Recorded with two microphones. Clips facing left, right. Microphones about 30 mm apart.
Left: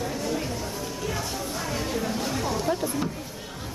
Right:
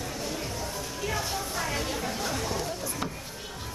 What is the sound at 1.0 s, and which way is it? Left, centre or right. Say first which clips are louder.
Chatter: right 1 dB; centre.